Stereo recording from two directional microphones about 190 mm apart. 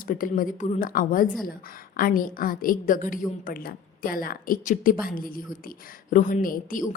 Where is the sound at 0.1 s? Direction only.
45° left (ahead or behind).